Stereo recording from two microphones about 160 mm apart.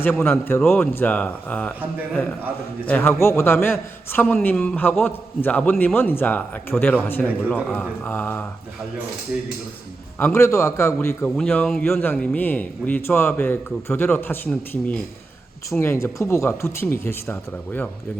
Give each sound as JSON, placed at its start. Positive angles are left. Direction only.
{"t": 0.0, "sound": "a man's voice", "side_deg": 10}
{"t": 2.8, "sound": "a man's voice", "side_deg": 10}
{"t": 9.3, "sound": "speech", "side_deg": -10}
{"t": 10.2, "sound": "a man's voice", "side_deg": 15}
{"t": 11.3, "sound": "a man's voice", "side_deg": 5}